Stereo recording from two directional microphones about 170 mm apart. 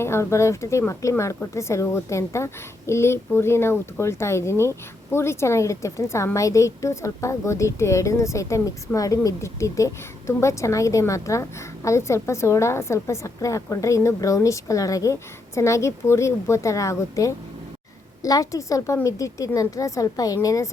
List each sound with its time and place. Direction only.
0.0 s a woman's voice: 15° left (ahead or behind)